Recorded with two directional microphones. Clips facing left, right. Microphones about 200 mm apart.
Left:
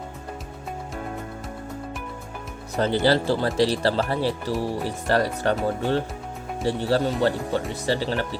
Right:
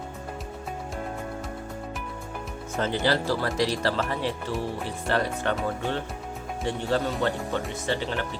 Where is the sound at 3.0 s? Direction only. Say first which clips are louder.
Left 4 dB; 30° left (ahead or behind).